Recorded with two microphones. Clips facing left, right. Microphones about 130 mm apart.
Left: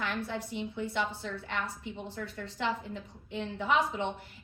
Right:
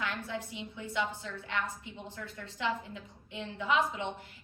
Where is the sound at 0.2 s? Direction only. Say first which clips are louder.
Left 4 dB; 55° left (ahead or behind).